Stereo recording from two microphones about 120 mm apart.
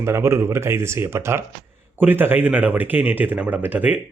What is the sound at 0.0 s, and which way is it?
Speech, 20° right (ahead or behind).